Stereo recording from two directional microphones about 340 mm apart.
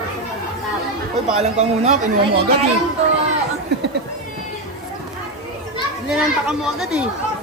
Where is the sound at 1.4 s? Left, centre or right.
Centre.